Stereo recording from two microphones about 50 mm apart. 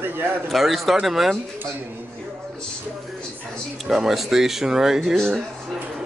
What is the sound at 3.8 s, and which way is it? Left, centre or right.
Speech, centre.